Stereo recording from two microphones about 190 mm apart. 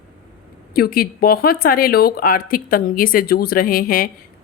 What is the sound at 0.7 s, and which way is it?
Speech, 50° left (ahead or behind).